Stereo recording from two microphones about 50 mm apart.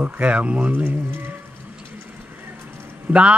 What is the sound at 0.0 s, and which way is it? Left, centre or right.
Speech, right.